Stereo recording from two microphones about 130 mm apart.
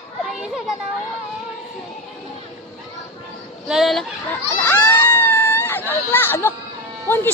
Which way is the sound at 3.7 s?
Centre (ahead or behind).